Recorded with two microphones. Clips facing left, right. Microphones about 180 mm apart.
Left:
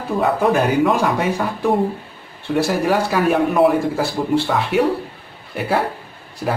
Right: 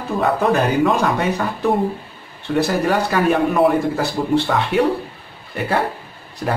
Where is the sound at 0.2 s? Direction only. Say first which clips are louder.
Even; 5° left (ahead or behind).